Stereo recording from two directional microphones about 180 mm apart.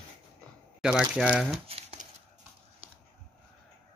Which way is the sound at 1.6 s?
35° right (ahead or behind).